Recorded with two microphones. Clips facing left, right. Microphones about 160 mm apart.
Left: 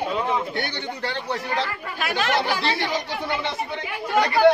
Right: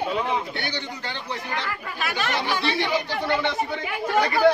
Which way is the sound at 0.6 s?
55° left (ahead or behind).